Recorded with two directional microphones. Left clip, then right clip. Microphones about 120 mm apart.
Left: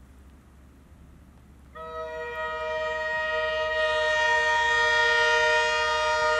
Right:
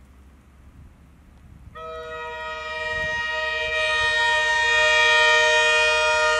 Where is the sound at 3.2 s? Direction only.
15° right (ahead or behind).